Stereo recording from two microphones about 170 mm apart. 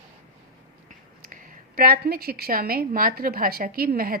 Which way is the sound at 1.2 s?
55° right (ahead or behind).